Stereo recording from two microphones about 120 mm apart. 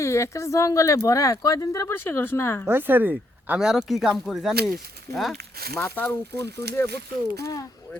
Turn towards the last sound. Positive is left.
turn(degrees=25)  # may be behind; listen again after turning